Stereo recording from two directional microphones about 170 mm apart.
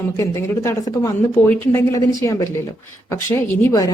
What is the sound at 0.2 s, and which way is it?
A woman's voice, 15° left (ahead or behind).